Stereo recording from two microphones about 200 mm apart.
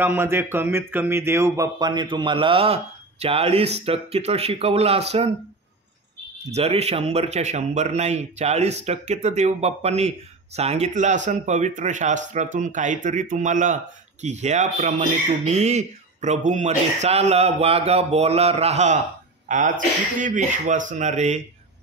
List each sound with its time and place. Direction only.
0.0 s speech: 10° right (ahead or behind); by 5.3 s 30° right (ahead or behind)
6.5 s speech: 30° right (ahead or behind)